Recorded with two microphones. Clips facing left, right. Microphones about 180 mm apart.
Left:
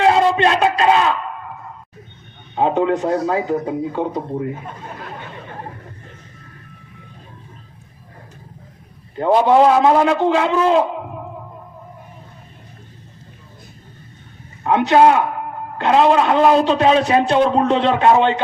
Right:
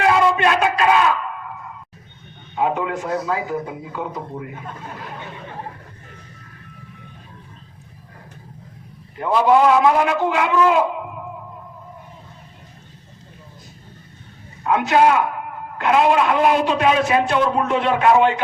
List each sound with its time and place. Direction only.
0.0 s a sound: 25° left (ahead or behind)
2.6 s a man's voice: 30° left (ahead or behind)
9.1 s a man's voice: 30° left (ahead or behind)
14.6 s a man's voice: 30° left (ahead or behind)